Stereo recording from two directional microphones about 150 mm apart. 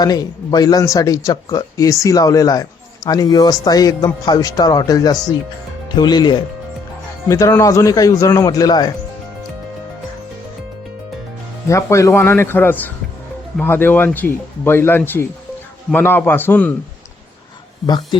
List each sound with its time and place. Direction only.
0.0 s speech: 25° left (ahead or behind)
11.7 s speech: 20° left (ahead or behind)
17.8 s speech: 30° left (ahead or behind)